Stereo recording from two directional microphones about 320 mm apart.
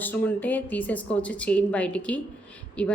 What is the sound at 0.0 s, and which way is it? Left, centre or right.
A woman's voice, centre.